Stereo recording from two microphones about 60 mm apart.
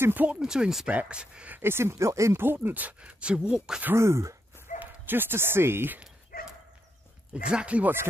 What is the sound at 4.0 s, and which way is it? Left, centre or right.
Speech, right.